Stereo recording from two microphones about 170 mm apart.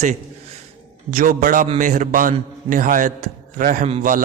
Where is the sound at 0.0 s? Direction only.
40° right (ahead or behind).